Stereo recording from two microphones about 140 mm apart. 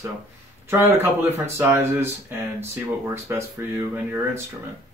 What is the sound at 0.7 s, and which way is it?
Speech, 15° right (ahead or behind).